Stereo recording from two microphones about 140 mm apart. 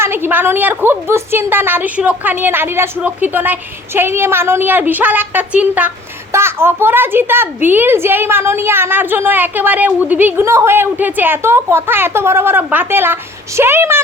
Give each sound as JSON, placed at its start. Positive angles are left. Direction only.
{"t": 0.0, "sound": "a child's voice", "side_deg": -15}